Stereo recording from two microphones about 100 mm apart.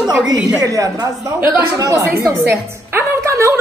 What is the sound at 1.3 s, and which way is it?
Speech, 25° right (ahead or behind).